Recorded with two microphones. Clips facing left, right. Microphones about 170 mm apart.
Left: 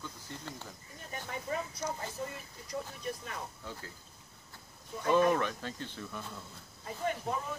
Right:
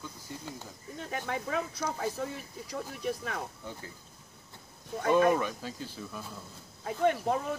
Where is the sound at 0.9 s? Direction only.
85° right.